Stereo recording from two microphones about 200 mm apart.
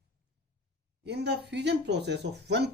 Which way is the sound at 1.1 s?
55° right (ahead or behind).